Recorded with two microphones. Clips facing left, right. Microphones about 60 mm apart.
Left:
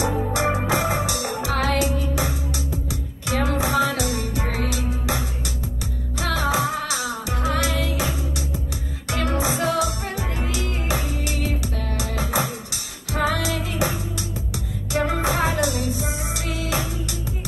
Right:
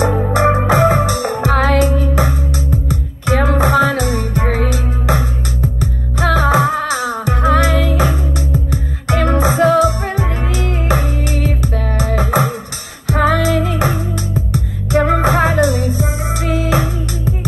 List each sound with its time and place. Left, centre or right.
0.0 s music: right